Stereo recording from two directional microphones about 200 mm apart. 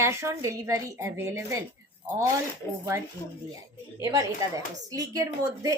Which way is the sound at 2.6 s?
10° left (ahead or behind).